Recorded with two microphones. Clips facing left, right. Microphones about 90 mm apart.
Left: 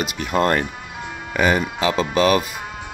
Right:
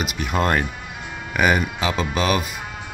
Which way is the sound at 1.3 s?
10° right (ahead or behind).